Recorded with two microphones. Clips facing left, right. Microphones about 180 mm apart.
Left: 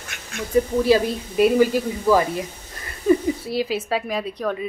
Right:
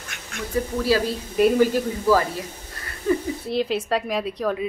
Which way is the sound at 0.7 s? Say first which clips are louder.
Left 1 dB; 20° left (ahead or behind).